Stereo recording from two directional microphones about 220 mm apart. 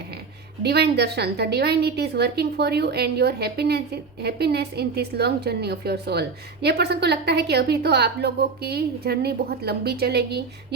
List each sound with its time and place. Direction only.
0.6 s a woman's voice: 50° right (ahead or behind)